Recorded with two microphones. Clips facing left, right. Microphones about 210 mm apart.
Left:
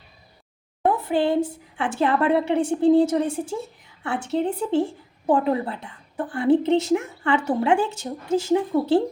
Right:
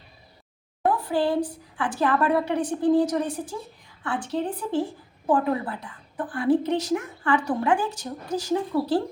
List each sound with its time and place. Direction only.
0.9 s a woman's voice: 25° left (ahead or behind)